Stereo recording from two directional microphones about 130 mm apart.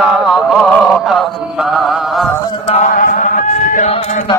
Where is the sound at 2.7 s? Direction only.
85° left.